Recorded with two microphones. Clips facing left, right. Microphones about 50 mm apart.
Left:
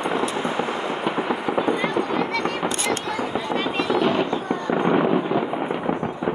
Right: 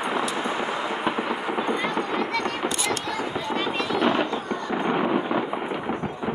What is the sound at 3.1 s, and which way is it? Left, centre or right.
Fireworks, centre.